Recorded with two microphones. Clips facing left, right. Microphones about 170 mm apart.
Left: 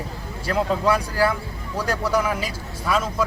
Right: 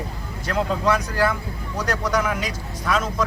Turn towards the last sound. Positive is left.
turn(degrees=5)  # may be behind; listen again after turning